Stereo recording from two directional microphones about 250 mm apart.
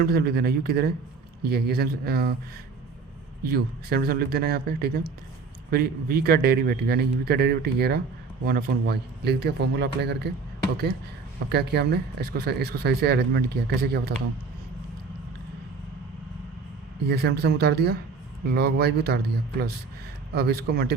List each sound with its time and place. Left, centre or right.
0.0 s speech: right
3.4 s speech: right
11.4 s speech: right
17.1 s speech: right